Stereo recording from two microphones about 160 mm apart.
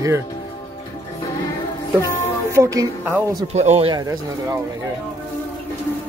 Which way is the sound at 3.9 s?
25° right (ahead or behind).